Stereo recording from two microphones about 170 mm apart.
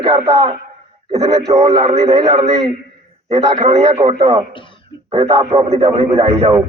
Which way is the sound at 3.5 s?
40° right (ahead or behind).